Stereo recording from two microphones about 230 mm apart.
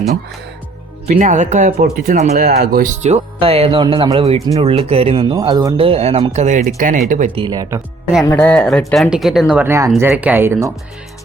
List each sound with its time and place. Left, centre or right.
1.0 s speech: right
7.4 s speech: centre
8.2 s speech: centre